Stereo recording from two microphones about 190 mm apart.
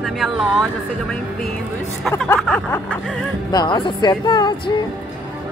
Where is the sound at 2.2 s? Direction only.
10° left (ahead or behind).